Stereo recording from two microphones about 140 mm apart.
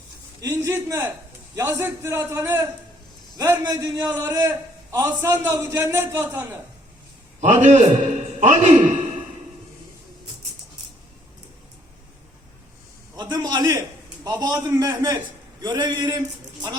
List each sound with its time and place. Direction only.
0.4 s a man's voice: 15° right (ahead or behind)
7.4 s a man's voice: 60° right (ahead or behind)
13.1 s a sound: 30° right (ahead or behind)
14.3 s a man's voice: 30° right (ahead or behind)